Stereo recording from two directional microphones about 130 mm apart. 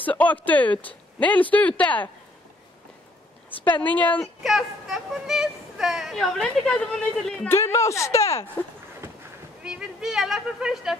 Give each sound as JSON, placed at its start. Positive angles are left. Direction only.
{"t": 0.0, "sound": "speech", "side_deg": 10}
{"t": 3.6, "sound": "speech", "side_deg": 15}
{"t": 4.4, "sound": "speech", "side_deg": -5}
{"t": 7.4, "sound": "speech", "side_deg": 20}
{"t": 9.7, "sound": "speech", "side_deg": -5}